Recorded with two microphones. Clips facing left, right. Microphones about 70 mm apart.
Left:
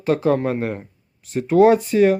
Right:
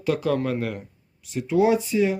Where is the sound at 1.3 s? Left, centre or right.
Left.